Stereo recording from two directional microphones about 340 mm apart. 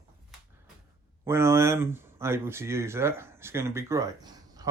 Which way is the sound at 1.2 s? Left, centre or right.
Centre.